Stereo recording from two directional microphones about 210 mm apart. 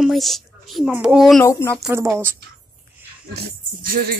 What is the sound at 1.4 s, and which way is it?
Speech, 10° left (ahead or behind).